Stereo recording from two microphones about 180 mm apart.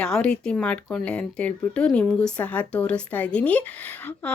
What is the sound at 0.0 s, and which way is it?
Speech, 5° left (ahead or behind).